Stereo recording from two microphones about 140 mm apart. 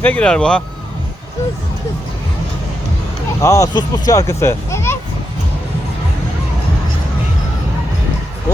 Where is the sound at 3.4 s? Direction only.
20° left (ahead or behind).